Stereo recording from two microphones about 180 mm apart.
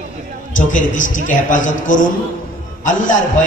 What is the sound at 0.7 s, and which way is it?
A man's voice, 45° left (ahead or behind).